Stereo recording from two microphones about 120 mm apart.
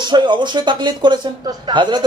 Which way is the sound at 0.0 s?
40° right (ahead or behind).